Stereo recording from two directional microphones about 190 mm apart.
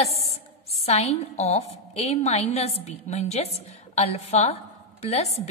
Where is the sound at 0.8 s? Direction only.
35° left (ahead or behind).